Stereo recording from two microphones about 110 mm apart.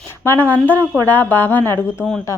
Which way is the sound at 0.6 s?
15° left (ahead or behind).